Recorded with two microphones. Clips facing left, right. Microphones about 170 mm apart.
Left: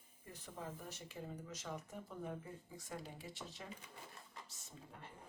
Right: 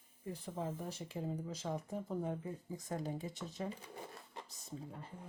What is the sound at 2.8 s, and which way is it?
Speech, 45° right (ahead or behind).